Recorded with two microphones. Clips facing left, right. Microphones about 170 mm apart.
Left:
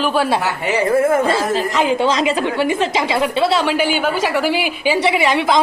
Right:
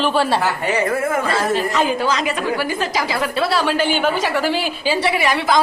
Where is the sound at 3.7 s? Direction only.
10° left (ahead or behind).